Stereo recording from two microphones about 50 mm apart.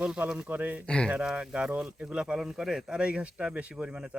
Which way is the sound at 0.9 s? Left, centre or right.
Centre.